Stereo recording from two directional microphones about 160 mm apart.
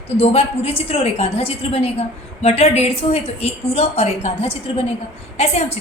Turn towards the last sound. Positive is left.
turn(degrees=45)  # may be behind; listen again after turning